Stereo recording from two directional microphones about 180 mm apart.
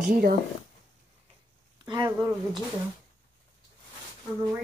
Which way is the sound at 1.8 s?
25° right (ahead or behind).